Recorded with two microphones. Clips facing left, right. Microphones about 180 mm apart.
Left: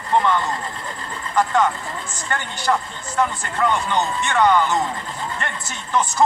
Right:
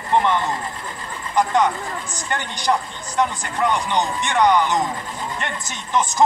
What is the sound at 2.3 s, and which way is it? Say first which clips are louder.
Speech: even; 15° right (ahead or behind).